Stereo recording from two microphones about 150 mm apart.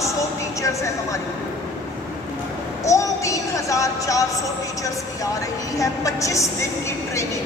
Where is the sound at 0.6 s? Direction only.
20° left (ahead or behind).